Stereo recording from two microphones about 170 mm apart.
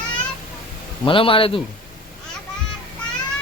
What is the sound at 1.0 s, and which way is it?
Speech, 30° left (ahead or behind).